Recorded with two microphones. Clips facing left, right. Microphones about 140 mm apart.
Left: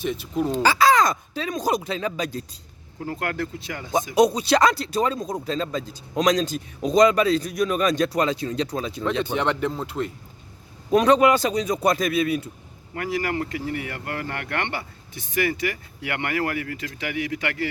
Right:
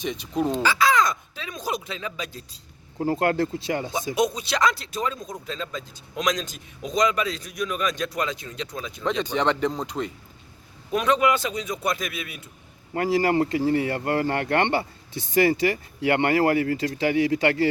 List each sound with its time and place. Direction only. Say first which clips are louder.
0.0 s speech: left 1 dB; 5° left (ahead or behind)
0.6 s speech: left 5 dB; 35° left (ahead or behind)
3.0 s speech: right 6 dB; 30° right (ahead or behind)
4.1 s speech: left 6 dB; 35° left (ahead or behind)
9.0 s speech: right 1 dB; 10° left (ahead or behind)
10.9 s speech: left 5 dB; 35° left (ahead or behind)
12.9 s speech: right 5 dB; 30° right (ahead or behind)